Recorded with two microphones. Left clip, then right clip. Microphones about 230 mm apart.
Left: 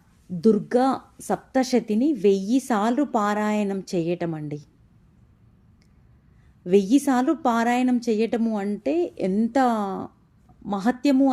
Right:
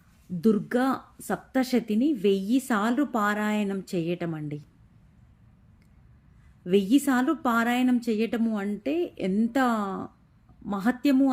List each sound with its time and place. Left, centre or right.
0.4 s a woman's voice: centre
6.7 s a woman's voice: centre